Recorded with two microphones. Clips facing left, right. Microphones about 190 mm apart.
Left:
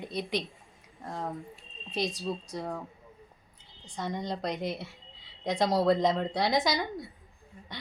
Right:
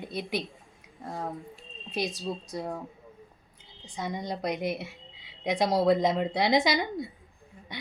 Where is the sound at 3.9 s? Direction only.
10° right (ahead or behind).